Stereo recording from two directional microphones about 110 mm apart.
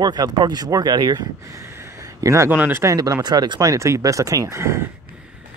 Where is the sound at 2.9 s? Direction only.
35° right (ahead or behind).